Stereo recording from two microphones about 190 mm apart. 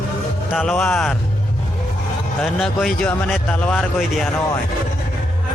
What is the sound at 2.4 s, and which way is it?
Speech, centre (ahead or behind).